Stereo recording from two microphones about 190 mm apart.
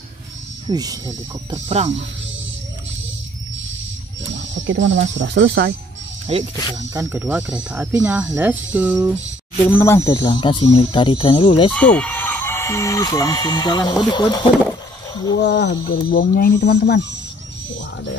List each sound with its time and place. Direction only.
0.7 s speech: 20° right (ahead or behind)
1.5 s speech: 35° right (ahead or behind)
4.4 s speech: 75° right (ahead or behind)
6.3 s speech: 30° right (ahead or behind)
6.9 s speech: 15° right (ahead or behind)
9.7 s speech: 15° left (ahead or behind); by 11.7 s 30° left (ahead or behind)
11.7 s speech: 5° left (ahead or behind)
15.4 s speech: 60° left (ahead or behind)